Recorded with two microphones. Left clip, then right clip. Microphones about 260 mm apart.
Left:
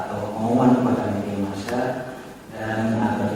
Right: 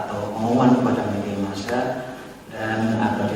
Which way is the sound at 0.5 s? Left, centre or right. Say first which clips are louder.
Even; right.